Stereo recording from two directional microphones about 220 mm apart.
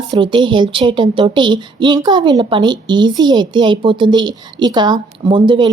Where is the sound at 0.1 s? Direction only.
20° right (ahead or behind).